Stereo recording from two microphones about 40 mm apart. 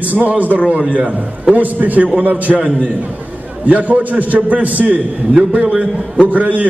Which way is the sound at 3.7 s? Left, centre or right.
Right.